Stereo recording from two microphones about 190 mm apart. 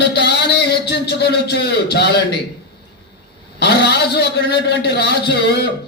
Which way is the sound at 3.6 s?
60° left (ahead or behind).